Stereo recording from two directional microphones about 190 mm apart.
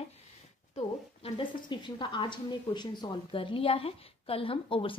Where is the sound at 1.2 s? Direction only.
25° left (ahead or behind).